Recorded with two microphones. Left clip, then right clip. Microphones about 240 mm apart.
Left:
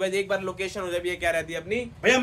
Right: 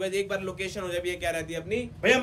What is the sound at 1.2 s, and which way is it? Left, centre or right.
Speech, left.